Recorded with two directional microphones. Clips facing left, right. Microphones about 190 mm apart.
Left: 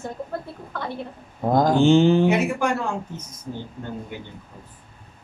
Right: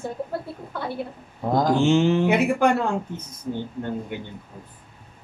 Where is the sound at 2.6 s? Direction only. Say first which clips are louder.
Right 4 dB; 60° right (ahead or behind).